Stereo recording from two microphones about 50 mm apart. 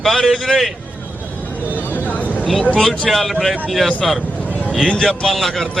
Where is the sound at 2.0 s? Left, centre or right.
Left.